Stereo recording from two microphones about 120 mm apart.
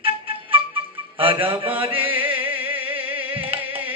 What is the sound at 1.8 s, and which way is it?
Music, 50° right (ahead or behind).